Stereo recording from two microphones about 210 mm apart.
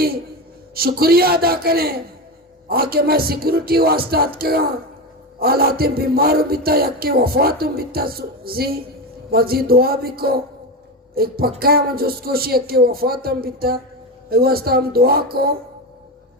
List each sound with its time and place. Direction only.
0.7 s speech: 45° right (ahead or behind)